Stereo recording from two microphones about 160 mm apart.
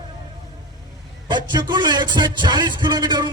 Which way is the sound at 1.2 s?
25° right (ahead or behind).